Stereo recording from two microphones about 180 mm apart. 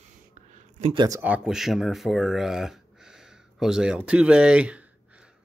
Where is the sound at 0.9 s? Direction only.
20° right (ahead or behind).